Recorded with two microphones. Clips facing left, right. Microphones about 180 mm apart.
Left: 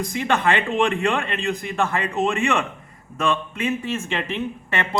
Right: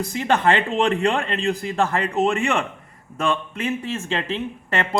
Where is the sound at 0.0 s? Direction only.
35° right (ahead or behind).